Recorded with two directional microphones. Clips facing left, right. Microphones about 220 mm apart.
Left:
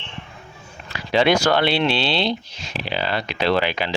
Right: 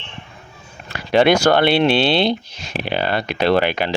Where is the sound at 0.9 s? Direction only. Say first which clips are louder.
Right 4 dB; 55° right (ahead or behind).